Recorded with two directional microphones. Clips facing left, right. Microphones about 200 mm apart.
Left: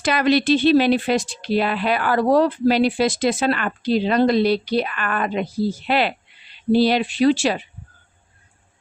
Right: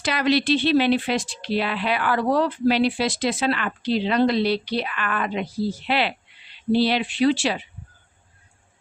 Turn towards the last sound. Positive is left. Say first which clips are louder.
# left 3 dB
turn(degrees=45)  # may be behind; listen again after turning